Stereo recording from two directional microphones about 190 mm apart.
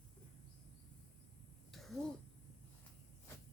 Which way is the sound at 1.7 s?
Centre (ahead or behind).